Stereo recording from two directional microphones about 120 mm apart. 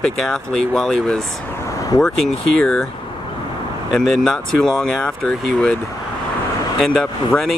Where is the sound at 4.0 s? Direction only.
5° left (ahead or behind).